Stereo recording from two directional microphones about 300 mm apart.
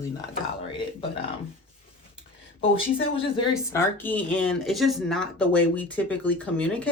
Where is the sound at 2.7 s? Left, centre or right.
Centre.